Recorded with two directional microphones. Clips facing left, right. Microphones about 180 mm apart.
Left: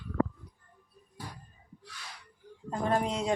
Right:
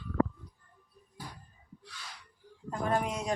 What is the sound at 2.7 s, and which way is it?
Speech, 30° left (ahead or behind).